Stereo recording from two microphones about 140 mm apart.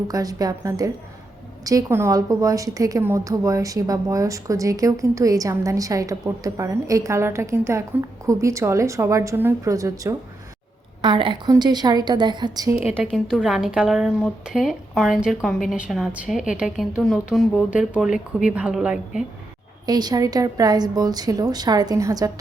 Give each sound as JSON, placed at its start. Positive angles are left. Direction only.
{"t": 0.1, "sound": "a woman's voice", "side_deg": -25}
{"t": 11.0, "sound": "a woman's voice", "side_deg": -35}
{"t": 13.0, "sound": "a woman's voice", "side_deg": 0}
{"t": 19.8, "sound": "a woman's voice", "side_deg": -30}